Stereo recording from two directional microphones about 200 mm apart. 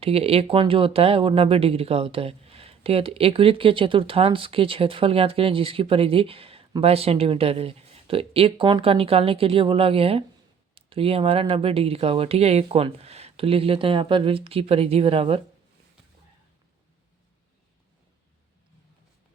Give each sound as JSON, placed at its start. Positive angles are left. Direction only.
{"t": 0.0, "sound": "speech", "side_deg": -30}